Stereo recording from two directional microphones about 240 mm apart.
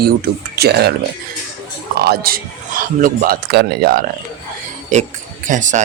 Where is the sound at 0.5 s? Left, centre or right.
Right.